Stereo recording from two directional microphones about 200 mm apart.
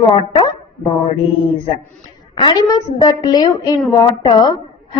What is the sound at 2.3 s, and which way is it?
Speech, 20° left (ahead or behind).